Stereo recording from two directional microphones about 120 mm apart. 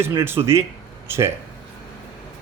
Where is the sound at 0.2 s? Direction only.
20° right (ahead or behind).